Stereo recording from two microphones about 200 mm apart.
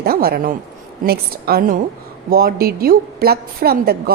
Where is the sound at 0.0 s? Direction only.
50° right (ahead or behind).